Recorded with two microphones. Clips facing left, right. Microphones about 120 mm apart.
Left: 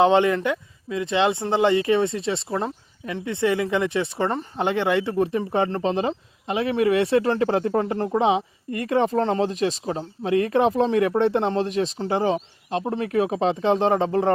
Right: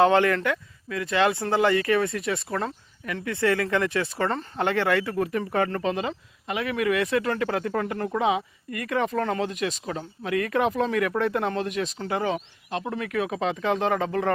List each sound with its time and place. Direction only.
0.0 s speech: 20° left (ahead or behind)